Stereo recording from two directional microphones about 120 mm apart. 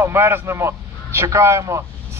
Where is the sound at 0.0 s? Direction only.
20° right (ahead or behind).